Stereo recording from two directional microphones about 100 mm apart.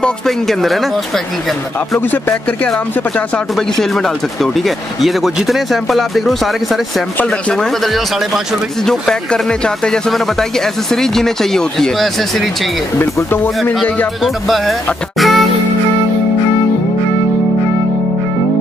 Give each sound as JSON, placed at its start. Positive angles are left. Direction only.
{"t": 0.0, "sound": "speech", "side_deg": 0}
{"t": 2.0, "sound": "speech", "side_deg": 20}
{"t": 3.9, "sound": "speech", "side_deg": 0}
{"t": 7.2, "sound": "speech", "side_deg": 10}
{"t": 13.0, "sound": "speech", "side_deg": 20}
{"t": 14.2, "sound": "speech", "side_deg": 0}